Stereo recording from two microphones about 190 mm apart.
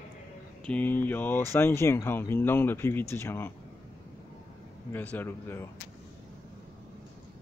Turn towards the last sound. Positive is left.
turn(degrees=10)  # may be behind; listen again after turning